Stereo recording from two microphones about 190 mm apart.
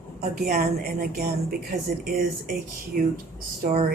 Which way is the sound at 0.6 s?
55° right (ahead or behind).